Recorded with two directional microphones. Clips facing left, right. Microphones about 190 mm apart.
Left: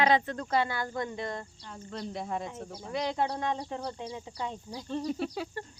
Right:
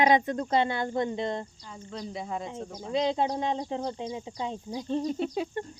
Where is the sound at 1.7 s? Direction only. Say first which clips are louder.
Left 3 dB; centre (ahead or behind).